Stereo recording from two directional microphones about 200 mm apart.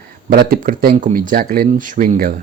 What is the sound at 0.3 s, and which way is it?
Speech, 45° right (ahead or behind).